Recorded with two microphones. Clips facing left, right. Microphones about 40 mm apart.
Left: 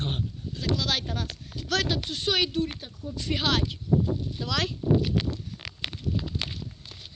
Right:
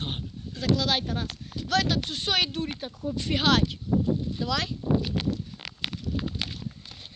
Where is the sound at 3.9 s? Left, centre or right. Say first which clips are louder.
Left 2 dB; right.